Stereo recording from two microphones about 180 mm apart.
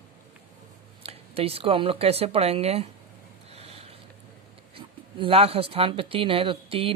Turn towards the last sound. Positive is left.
turn(degrees=-30)  # may be behind; listen again after turning